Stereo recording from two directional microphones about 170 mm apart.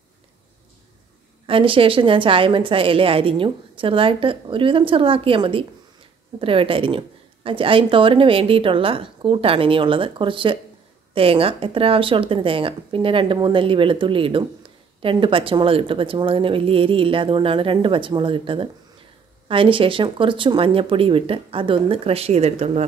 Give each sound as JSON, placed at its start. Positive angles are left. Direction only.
{"t": 1.4, "sound": "a woman's voice", "side_deg": -30}